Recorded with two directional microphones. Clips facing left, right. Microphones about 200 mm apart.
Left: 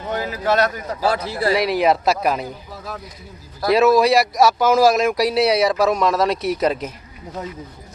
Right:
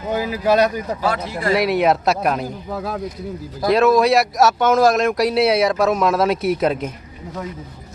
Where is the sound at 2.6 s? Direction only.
55° right (ahead or behind).